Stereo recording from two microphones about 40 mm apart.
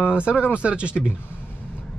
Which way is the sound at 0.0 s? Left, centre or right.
Right.